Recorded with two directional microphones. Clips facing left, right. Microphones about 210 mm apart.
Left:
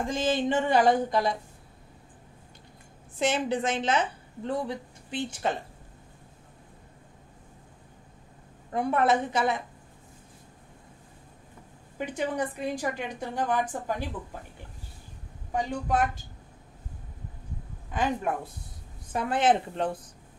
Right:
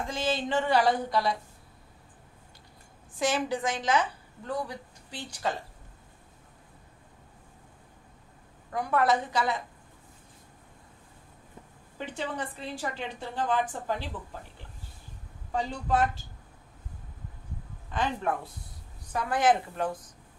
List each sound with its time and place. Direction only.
0.0 s a woman's voice: 15° left (ahead or behind)
3.2 s a woman's voice: 25° left (ahead or behind)
8.7 s a woman's voice: 25° left (ahead or behind)
12.0 s a woman's voice: 15° left (ahead or behind)
15.5 s a woman's voice: 15° left (ahead or behind)
17.9 s a woman's voice: 10° left (ahead or behind)
19.1 s a woman's voice: 25° left (ahead or behind)